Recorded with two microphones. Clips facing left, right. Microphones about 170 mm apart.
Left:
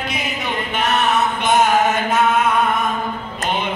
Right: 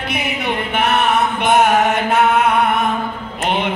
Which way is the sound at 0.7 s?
60° right (ahead or behind).